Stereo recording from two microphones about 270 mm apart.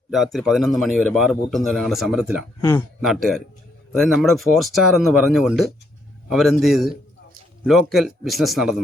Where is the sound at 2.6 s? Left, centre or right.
Centre.